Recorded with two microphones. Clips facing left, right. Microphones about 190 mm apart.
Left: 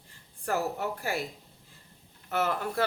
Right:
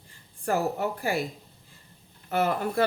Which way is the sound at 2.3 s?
15° right (ahead or behind).